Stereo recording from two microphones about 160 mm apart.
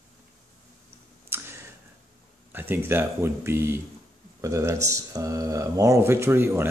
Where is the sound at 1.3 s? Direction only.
15° right (ahead or behind).